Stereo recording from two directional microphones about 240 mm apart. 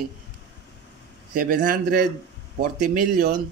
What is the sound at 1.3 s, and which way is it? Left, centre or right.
Speech, right.